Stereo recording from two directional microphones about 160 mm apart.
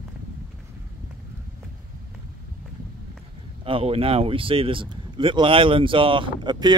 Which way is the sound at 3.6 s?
35° right (ahead or behind).